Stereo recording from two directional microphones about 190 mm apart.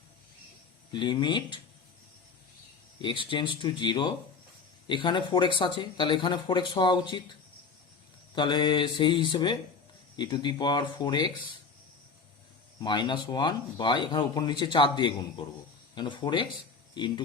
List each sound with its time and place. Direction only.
0.9 s speech: 25° left (ahead or behind)
3.0 s speech: 25° left (ahead or behind)
8.4 s speech: 25° left (ahead or behind)
12.8 s speech: 25° left (ahead or behind)